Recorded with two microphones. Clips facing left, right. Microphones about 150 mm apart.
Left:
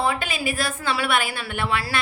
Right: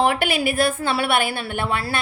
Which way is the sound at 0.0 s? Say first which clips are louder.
Right 5 dB; 70° right (ahead or behind).